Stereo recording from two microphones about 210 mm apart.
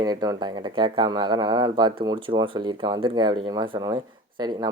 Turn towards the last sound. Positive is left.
turn(degrees=-20)  # may be behind; listen again after turning